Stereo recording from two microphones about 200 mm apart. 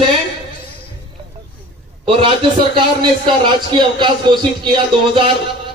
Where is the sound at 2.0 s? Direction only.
25° right (ahead or behind).